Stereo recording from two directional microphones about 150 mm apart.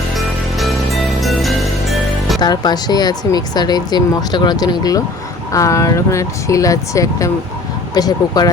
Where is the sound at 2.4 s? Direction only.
30° left (ahead or behind).